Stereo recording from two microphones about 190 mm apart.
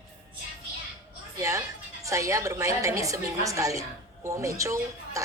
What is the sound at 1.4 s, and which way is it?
A woman's voice, 15° right (ahead or behind).